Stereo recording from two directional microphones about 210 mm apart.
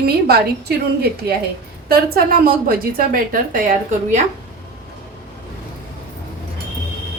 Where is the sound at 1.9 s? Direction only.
45° right (ahead or behind).